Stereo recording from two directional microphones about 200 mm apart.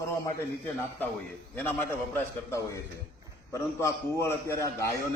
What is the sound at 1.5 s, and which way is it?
A man's voice, 10° left (ahead or behind).